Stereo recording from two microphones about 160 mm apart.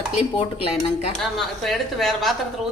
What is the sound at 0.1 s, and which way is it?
Speech, 40° left (ahead or behind).